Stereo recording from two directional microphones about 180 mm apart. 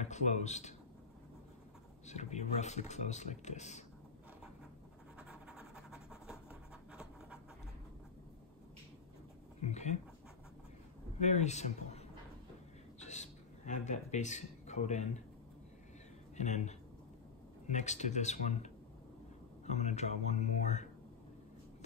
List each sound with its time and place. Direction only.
0.0 s a man's voice: 40° left (ahead or behind)
2.0 s speech: 40° left (ahead or behind)
5.2 s writing: 5° right (ahead or behind)
9.6 s speech: 40° left (ahead or behind)
11.1 s speech: 40° left (ahead or behind)
13.0 s a sound: 40° left (ahead or behind)
16.3 s speech: 40° left (ahead or behind)